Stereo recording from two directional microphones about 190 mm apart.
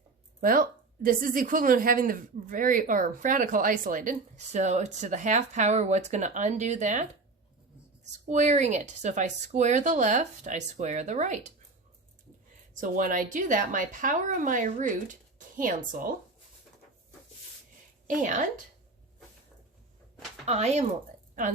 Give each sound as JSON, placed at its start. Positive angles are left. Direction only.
{"t": 0.4, "sound": "a woman's voice", "side_deg": -45}
{"t": 8.3, "sound": "speech", "side_deg": -40}
{"t": 12.7, "sound": "a woman's voice", "side_deg": -45}
{"t": 18.1, "sound": "speech", "side_deg": -40}
{"t": 20.4, "sound": "speech", "side_deg": -35}